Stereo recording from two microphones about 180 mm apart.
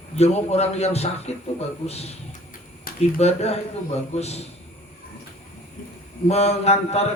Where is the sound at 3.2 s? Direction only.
35° left (ahead or behind).